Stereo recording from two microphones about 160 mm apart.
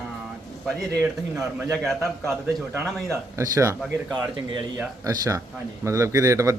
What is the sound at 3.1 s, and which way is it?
Speech, 20° right (ahead or behind).